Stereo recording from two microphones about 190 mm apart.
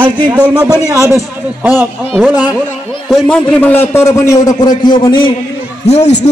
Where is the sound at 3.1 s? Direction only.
5° left (ahead or behind); by 5.2 s 25° left (ahead or behind).